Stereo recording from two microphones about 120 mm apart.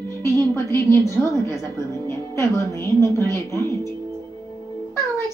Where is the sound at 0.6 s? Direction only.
25° left (ahead or behind).